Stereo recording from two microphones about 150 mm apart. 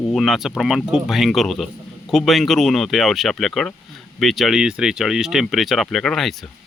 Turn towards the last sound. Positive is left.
turn(degrees=0)  # may be behind; listen again after turning